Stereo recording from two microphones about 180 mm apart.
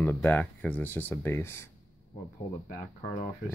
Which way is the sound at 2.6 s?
50° left (ahead or behind).